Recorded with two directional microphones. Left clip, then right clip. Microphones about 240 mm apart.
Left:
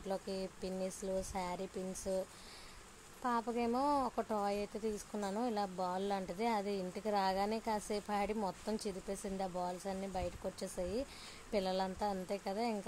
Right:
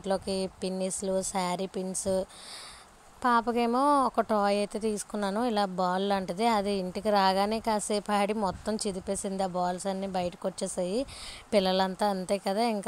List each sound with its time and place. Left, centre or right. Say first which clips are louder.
0.0 s speech: right 11 dB; right